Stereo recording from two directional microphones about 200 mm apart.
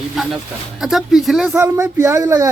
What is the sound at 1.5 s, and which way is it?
Speech, 15° right (ahead or behind).